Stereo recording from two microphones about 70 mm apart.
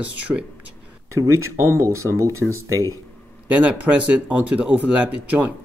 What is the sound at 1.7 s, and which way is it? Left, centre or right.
Speech, right.